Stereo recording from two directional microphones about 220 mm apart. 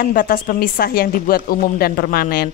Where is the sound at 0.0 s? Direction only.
40° left (ahead or behind).